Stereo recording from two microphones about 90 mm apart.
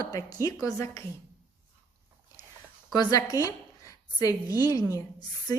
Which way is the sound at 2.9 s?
45° left (ahead or behind).